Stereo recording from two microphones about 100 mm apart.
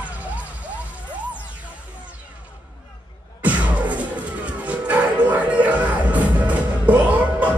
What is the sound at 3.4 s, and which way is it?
Music, 15° right (ahead or behind).